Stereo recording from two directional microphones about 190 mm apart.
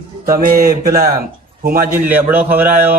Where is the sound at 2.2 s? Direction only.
10° right (ahead or behind).